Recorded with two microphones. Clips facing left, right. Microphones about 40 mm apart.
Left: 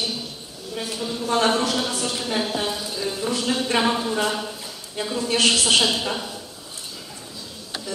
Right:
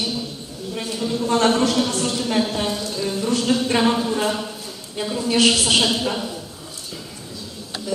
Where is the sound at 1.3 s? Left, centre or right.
Centre.